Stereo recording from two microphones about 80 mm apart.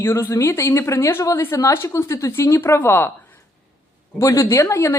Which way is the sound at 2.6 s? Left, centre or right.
Left.